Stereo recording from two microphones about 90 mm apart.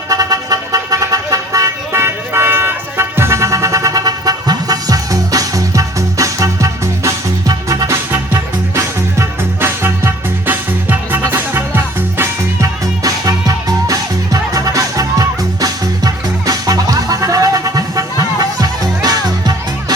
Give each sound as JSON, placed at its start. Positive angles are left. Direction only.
{"t": 0.1, "sound": "vehicle", "side_deg": -40}
{"t": 8.3, "sound": "music", "side_deg": -30}
{"t": 13.0, "sound": "music", "side_deg": -45}